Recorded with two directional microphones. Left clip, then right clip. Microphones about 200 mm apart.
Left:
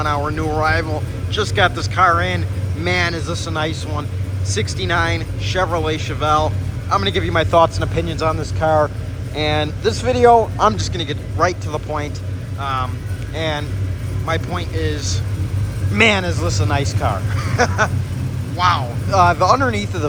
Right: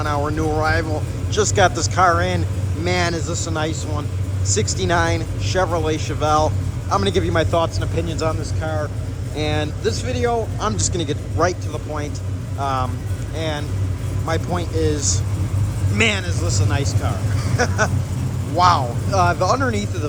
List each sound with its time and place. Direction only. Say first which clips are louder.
0.0 s speech: left 2 dB; 10° right (ahead or behind)
9.3 s speech: left 4 dB; 10° right (ahead or behind)
9.9 s a man's voice: left 12 dB; 5° left (ahead or behind)
10.8 s speech: right 1 dB; 20° right (ahead or behind)
12.5 s speech: even; 20° right (ahead or behind)
16.0 s a man's voice: left 5 dB; centre (ahead or behind)
18.5 s speech: right 2 dB; 30° right (ahead or behind)
19.1 s speech: left 5 dB; 10° right (ahead or behind)